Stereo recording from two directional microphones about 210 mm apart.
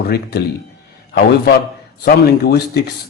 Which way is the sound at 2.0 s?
50° left (ahead or behind).